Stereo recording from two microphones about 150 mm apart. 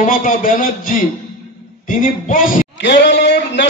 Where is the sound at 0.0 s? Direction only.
60° left (ahead or behind).